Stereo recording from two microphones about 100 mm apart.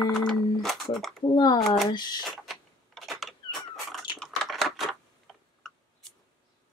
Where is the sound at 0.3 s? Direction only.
5° left (ahead or behind).